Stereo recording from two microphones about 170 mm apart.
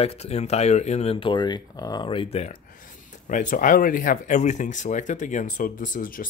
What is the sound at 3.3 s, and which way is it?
Speech, 50° left (ahead or behind).